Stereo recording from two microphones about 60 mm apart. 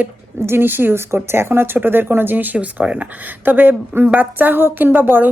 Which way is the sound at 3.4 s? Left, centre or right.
Right.